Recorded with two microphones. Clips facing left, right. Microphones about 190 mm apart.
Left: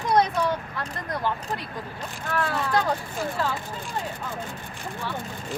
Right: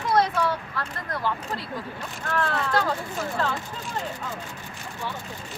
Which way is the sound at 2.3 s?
15° left (ahead or behind).